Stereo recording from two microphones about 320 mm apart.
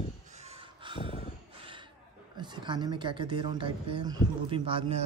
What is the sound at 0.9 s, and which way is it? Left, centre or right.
Snort, centre.